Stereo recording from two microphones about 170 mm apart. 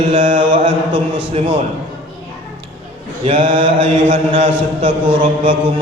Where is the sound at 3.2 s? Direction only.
30° right (ahead or behind).